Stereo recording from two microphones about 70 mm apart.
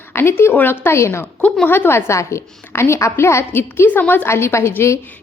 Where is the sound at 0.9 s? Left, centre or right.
Left.